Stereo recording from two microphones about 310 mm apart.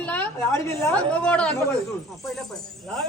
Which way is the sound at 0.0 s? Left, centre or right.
Centre.